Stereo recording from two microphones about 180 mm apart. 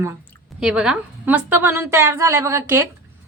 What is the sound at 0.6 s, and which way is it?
A woman's voice, 5° right (ahead or behind).